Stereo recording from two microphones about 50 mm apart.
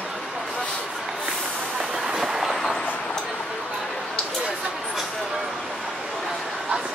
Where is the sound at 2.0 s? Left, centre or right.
Centre.